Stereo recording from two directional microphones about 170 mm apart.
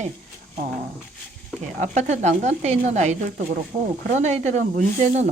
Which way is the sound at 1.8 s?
45° right (ahead or behind).